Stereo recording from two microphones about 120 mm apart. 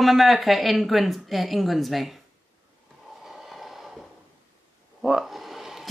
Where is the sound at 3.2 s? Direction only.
5° right (ahead or behind).